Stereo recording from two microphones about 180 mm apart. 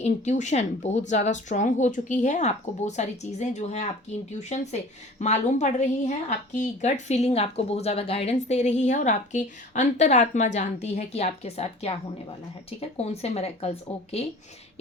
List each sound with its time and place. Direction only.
0.0 s a woman's voice: 40° left (ahead or behind)